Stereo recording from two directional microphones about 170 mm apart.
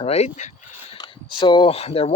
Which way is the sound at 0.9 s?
25° left (ahead or behind).